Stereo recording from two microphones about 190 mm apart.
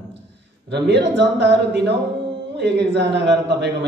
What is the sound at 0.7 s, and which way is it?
A man's voice, 65° right (ahead or behind).